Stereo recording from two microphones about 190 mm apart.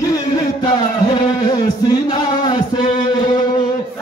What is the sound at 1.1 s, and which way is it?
Music, 20° left (ahead or behind).